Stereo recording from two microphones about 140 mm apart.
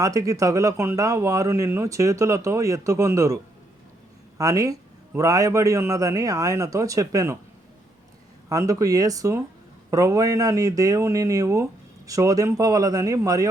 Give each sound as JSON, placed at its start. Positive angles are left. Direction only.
{"t": 0.0, "sound": "speech", "side_deg": -25}
{"t": 8.4, "sound": "speech", "side_deg": -25}